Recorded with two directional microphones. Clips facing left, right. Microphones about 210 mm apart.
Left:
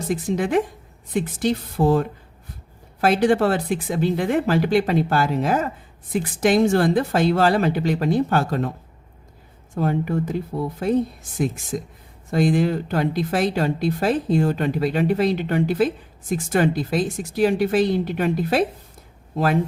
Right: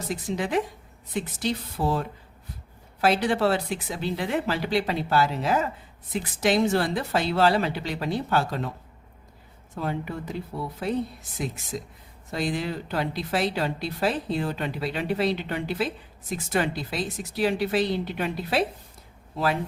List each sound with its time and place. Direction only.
0.1 s speech: 50° left (ahead or behind)
9.7 s speech: 50° left (ahead or behind)
12.3 s speech: 50° left (ahead or behind)